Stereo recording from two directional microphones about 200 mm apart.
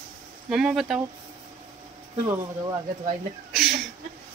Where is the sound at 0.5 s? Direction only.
5° right (ahead or behind).